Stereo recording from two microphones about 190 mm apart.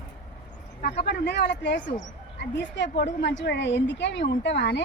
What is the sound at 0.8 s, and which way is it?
Speech, 60° left (ahead or behind).